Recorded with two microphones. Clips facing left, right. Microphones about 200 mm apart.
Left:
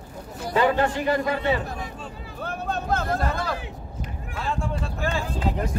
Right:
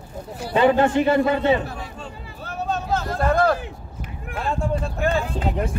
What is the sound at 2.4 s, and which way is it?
Vehicle, 55° left (ahead or behind).